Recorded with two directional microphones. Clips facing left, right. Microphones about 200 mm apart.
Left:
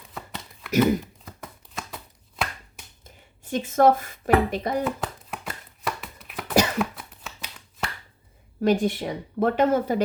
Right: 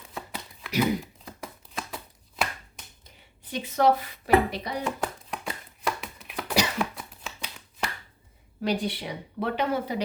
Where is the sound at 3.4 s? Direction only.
45° left (ahead or behind).